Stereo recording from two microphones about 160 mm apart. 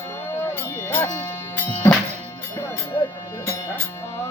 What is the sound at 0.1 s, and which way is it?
Music, 15° left (ahead or behind).